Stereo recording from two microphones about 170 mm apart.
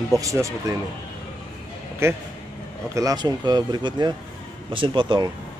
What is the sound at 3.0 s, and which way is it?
Speech, 20° right (ahead or behind).